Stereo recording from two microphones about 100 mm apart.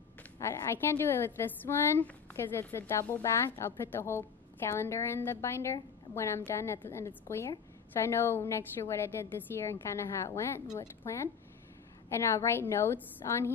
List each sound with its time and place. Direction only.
0.4 s a woman's voice: 25° left (ahead or behind)